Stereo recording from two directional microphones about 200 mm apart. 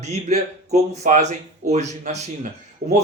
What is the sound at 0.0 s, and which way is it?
Speech, 35° right (ahead or behind).